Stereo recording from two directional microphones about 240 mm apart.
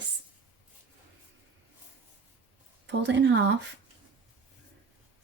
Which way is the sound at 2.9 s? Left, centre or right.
Right.